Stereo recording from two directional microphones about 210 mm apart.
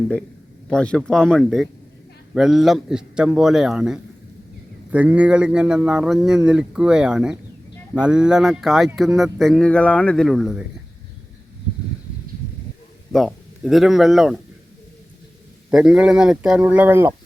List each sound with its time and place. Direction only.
0.7 s speech: 5° left (ahead or behind)
13.1 s speech: centre (ahead or behind)
15.7 s speech: 5° right (ahead or behind)